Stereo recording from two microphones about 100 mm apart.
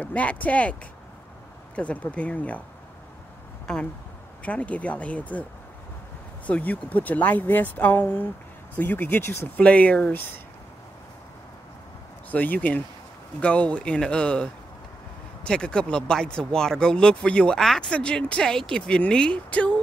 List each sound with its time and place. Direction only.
0.0 s speech: 15° left (ahead or behind)
1.8 s speech: 15° left (ahead or behind)
4.4 s speech: 15° left (ahead or behind)
6.4 s speech: 15° left (ahead or behind)
12.3 s speech: 15° left (ahead or behind)